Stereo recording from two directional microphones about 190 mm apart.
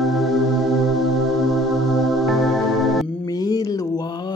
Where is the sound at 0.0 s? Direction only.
Centre (ahead or behind).